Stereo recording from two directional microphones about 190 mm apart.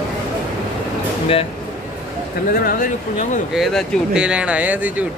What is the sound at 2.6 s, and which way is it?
Speech, 45° left (ahead or behind).